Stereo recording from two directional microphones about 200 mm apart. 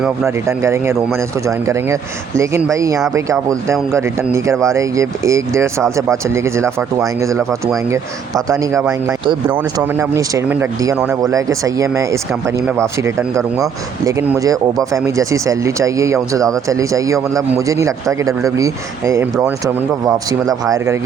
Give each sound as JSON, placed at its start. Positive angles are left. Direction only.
{"t": 0.3, "sound": "speech", "side_deg": -15}
{"t": 8.4, "sound": "speech", "side_deg": -15}
{"t": 20.5, "sound": "speech", "side_deg": -15}